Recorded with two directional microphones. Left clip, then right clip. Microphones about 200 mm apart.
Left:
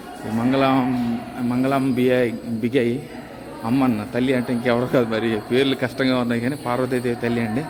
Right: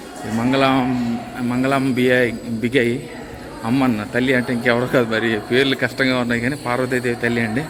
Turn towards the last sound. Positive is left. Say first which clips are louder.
# right 3 dB
turn(degrees=5)  # may be behind; listen again after turning